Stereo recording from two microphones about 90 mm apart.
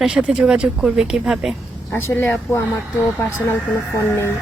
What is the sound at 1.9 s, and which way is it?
Speech, 25° left (ahead or behind).